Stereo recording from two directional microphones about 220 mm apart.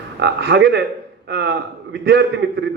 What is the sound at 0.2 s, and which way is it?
A man's voice, 50° right (ahead or behind).